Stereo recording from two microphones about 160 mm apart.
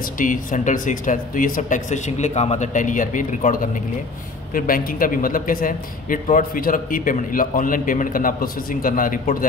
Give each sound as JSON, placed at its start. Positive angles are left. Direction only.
{"t": 0.2, "sound": "a man's voice", "side_deg": 55}